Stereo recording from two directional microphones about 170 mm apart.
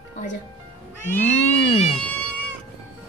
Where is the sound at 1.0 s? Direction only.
10° left (ahead or behind).